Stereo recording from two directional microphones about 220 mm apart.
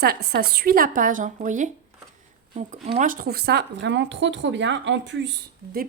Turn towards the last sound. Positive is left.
turn(degrees=-50)  # may be behind; listen again after turning